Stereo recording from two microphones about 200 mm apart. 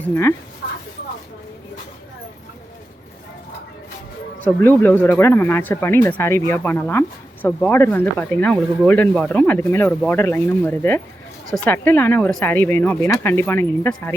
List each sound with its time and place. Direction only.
0.0 s speech: 10° left (ahead or behind)
0.6 s a sound: 50° left (ahead or behind)
4.4 s speech: 10° left (ahead or behind)